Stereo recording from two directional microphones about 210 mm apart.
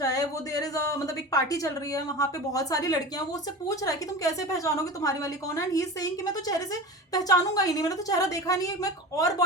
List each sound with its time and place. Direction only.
0.0 s speech: 15° left (ahead or behind)
7.1 s speech: 15° left (ahead or behind)